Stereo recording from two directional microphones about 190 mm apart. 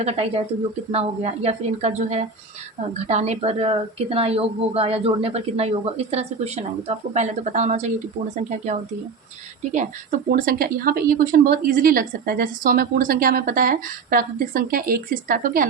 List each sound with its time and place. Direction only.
0.0 s a woman's voice: 30° right (ahead or behind); by 15.6 s 45° right (ahead or behind)